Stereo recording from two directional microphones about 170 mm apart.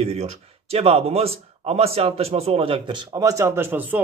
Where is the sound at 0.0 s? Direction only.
35° right (ahead or behind).